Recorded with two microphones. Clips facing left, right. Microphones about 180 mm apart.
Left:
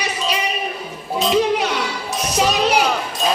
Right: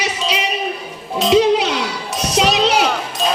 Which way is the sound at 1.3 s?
90° right.